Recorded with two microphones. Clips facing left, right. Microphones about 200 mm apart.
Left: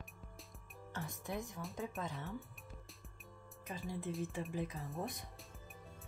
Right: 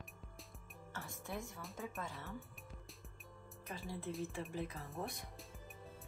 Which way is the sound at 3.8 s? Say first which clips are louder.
Left 2 dB; centre (ahead or behind).